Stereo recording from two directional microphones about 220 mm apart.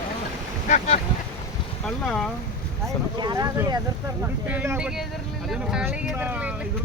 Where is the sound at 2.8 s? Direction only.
20° right (ahead or behind).